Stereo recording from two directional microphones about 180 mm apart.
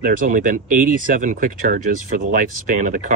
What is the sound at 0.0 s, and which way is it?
Speech, 50° right (ahead or behind).